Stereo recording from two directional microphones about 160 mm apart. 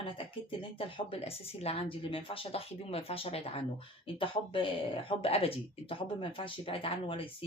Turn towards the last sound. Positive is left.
turn(degrees=35)  # may be behind; listen again after turning